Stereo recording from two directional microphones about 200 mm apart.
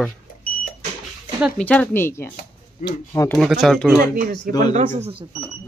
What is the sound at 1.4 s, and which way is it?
Speech, 5° left (ahead or behind).